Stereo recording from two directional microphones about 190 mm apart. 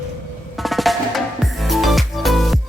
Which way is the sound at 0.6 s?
Centre (ahead or behind).